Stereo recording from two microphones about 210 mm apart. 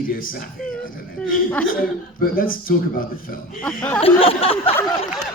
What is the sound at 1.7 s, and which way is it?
A man's voice, 45° left (ahead or behind).